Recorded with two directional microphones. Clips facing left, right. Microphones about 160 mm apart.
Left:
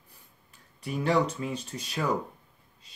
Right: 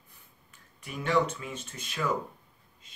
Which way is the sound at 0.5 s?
35° left (ahead or behind).